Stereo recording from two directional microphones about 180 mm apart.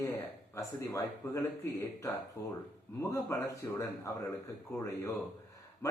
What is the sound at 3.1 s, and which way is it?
Speech, 15° left (ahead or behind).